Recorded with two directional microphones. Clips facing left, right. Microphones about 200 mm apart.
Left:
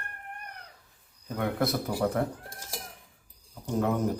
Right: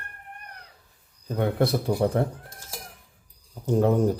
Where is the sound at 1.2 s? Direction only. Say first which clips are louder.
Right 4 dB; 30° right (ahead or behind).